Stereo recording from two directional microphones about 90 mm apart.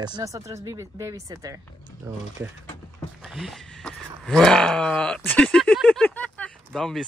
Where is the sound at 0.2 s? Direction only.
35° right (ahead or behind).